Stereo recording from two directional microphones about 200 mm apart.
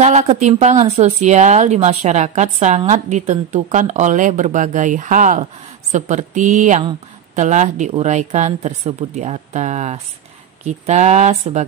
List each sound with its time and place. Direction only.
0.0 s speech: 35° right (ahead or behind)